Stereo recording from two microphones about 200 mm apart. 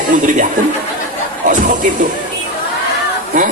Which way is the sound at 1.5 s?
40° right (ahead or behind).